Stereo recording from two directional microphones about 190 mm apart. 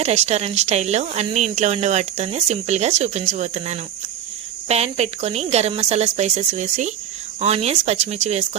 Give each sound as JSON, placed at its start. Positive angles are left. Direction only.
{"t": 0.0, "sound": "speech", "side_deg": -35}